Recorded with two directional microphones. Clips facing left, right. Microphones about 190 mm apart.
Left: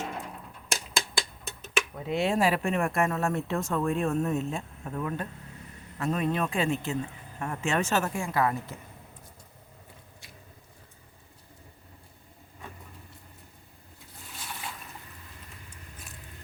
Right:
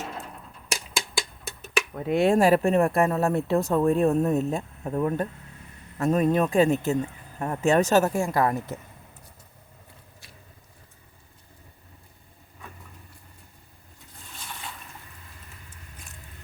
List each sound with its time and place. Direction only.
2.0 s speech: 50° right (ahead or behind)